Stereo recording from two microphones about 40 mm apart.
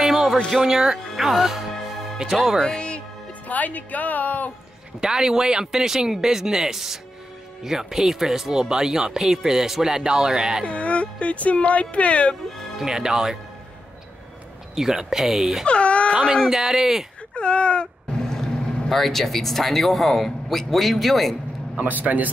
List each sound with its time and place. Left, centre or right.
0.0 s music: centre
0.5 s speech: centre
3.4 s speech: left
5.0 s speech: centre
10.6 s speech: left
12.7 s speech: centre
14.8 s speech: centre
15.6 s baby cry: left
16.4 s speech: centre
17.3 s speech: left
18.3 s speech: centre
21.7 s speech: right